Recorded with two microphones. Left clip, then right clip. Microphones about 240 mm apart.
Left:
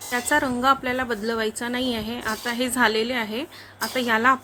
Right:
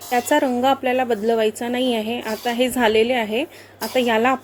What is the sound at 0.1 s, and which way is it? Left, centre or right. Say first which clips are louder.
Speech: right 4 dB; centre.